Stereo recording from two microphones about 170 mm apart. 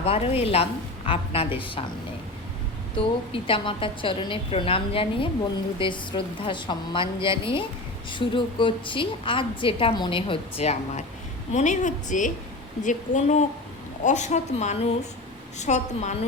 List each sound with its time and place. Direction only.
0.0 s a woman's voice: 35° left (ahead or behind)
3.3 s a woman's voice: 30° left (ahead or behind)